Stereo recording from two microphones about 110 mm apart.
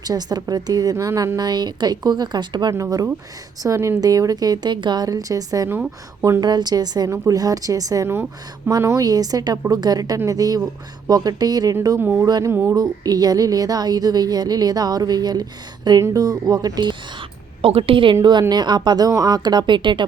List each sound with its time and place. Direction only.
0.0 s a woman's voice: 35° right (ahead or behind)
2.7 s a woman's voice: 30° right (ahead or behind)
11.9 s speech: 15° right (ahead or behind)
12.2 s a woman's voice: 35° right (ahead or behind)
12.5 s speech: 20° right (ahead or behind)
12.7 s a woman's voice: 35° right (ahead or behind)
17.6 s a woman's voice: 60° right (ahead or behind)